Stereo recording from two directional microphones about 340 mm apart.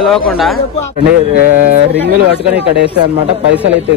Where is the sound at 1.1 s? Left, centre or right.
Right.